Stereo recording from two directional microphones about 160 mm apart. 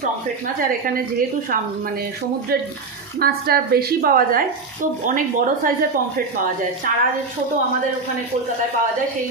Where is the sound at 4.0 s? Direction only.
65° right (ahead or behind).